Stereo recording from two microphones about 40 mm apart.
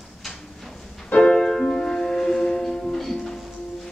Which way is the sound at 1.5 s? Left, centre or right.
Centre.